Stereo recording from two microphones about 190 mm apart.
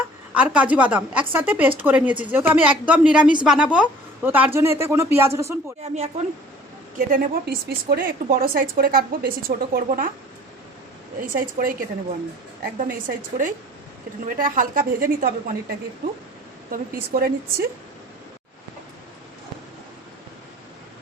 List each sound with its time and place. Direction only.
0.3 s a woman's voice: 5° right (ahead or behind)
5.8 s speech: 35° right (ahead or behind)
7.1 s a woman's voice: 50° right (ahead or behind)
11.2 s a woman's voice: 45° right (ahead or behind)
12.9 s a woman's voice: 45° right (ahead or behind)
16.7 s a woman's voice: 50° right (ahead or behind)